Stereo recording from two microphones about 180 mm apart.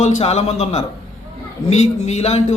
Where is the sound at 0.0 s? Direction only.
35° left (ahead or behind).